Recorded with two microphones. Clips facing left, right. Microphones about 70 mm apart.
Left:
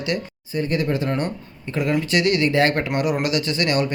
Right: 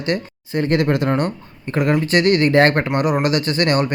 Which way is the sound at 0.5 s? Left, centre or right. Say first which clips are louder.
Right 5 dB; right.